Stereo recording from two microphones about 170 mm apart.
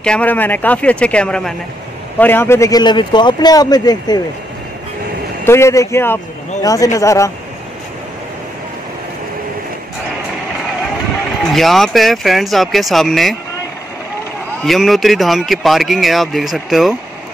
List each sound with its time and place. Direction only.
0.0 s a man's voice: 5° left (ahead or behind); by 4.2 s 20° left (ahead or behind)
5.4 s a man's voice: 15° left (ahead or behind)
11.4 s speech: centre (ahead or behind)
14.6 s speech: centre (ahead or behind)